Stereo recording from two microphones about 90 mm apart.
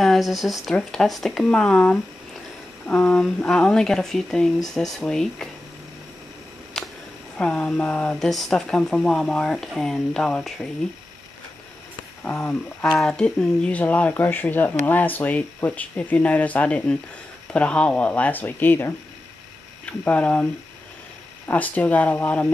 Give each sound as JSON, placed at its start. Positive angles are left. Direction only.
{"t": 0.0, "sound": "speech", "side_deg": 0}
{"t": 6.7, "sound": "a sound", "side_deg": 5}
{"t": 7.3, "sound": "speech", "side_deg": 15}
{"t": 12.2, "sound": "speech", "side_deg": 20}
{"t": 13.0, "sound": "speech", "side_deg": 10}
{"t": 20.1, "sound": "speech", "side_deg": 15}
{"t": 21.5, "sound": "speech", "side_deg": 20}